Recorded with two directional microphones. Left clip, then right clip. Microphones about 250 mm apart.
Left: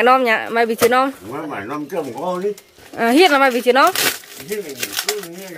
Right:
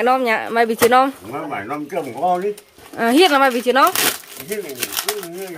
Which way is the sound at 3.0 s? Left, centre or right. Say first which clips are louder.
Left 1 dB; centre.